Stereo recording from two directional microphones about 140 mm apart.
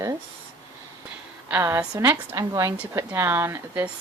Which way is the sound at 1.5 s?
15° right (ahead or behind).